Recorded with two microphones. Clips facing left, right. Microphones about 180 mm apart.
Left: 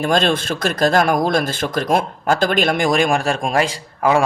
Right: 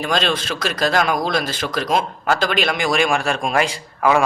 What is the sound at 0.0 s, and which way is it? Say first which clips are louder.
Speech: left 4 dB; 50° left (ahead or behind).